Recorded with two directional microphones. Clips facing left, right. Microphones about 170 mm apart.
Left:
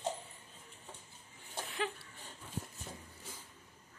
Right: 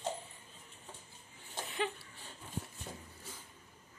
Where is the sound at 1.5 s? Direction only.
Centre (ahead or behind).